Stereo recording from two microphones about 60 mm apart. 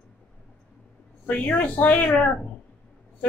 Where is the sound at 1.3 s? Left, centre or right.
Left.